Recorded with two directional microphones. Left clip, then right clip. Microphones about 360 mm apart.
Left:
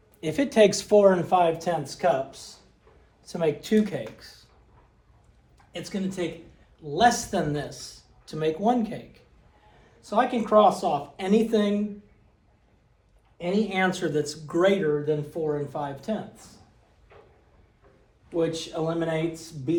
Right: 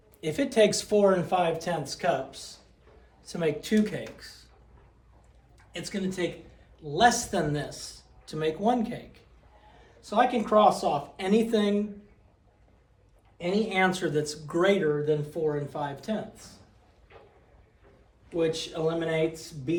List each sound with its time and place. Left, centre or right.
0.2 s speech: left
3.2 s speech: centre
5.7 s speech: centre
13.4 s speech: centre
18.3 s speech: centre